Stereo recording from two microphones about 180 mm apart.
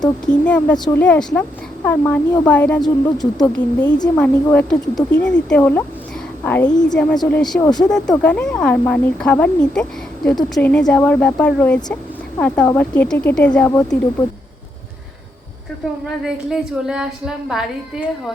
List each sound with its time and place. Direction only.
0.3 s speech: 5° left (ahead or behind)
3.9 s speech: 20° left (ahead or behind)
4.5 s a woman's voice: 5° left (ahead or behind)
7.6 s speech: 20° left (ahead or behind)
7.9 s speech: 5° left (ahead or behind)
16.2 s a woman's voice: 5° right (ahead or behind)